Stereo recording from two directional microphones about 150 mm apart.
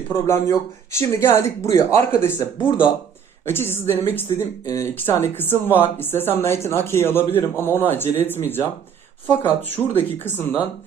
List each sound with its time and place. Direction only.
0.1 s a man's voice: 20° left (ahead or behind)